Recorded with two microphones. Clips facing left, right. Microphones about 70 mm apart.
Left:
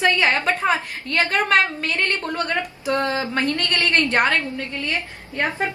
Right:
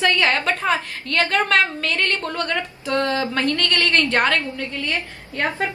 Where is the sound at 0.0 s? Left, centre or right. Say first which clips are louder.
Even; centre.